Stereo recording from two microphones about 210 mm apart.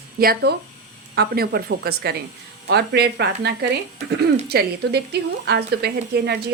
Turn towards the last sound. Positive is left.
turn(degrees=-50)  # may be behind; listen again after turning